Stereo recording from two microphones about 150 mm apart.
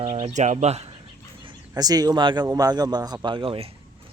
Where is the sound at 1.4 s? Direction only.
30° right (ahead or behind).